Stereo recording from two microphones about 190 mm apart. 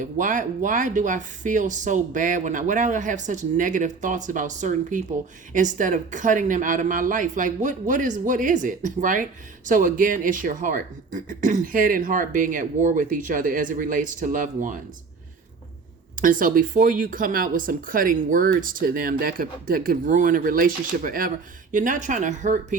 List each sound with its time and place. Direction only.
0.0 s speech: 45° right (ahead or behind)
16.2 s speech: 45° right (ahead or behind)